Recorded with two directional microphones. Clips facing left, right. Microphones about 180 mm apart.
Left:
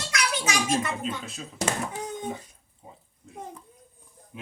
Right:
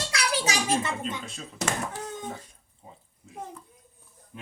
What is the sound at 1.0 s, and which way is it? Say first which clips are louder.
Speech: left 2 dB; centre (ahead or behind).